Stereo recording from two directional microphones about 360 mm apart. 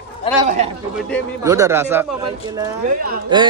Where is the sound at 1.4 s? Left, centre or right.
Centre.